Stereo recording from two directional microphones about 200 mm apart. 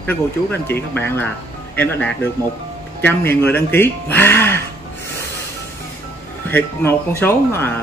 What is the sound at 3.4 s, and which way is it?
Speech, 10° left (ahead or behind).